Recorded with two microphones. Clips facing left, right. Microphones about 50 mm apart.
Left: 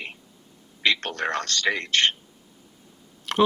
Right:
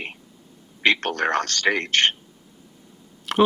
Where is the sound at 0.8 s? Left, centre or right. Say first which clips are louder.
Right 4 dB; right.